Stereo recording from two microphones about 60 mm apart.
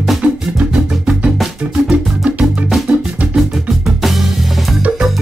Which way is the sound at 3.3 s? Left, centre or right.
Centre.